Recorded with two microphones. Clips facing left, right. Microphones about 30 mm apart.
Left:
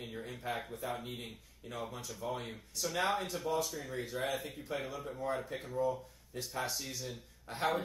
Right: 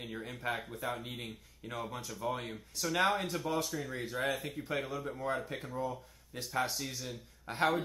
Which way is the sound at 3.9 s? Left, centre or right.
Centre.